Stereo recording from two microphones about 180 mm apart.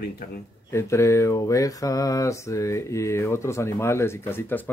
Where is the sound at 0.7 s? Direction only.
15° left (ahead or behind).